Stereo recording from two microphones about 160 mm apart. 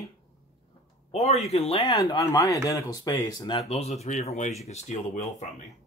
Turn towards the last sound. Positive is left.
turn(degrees=45)  # may be behind; listen again after turning